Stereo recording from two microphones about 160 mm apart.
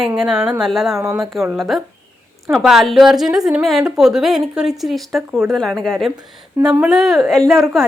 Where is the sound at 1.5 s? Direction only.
Centre (ahead or behind).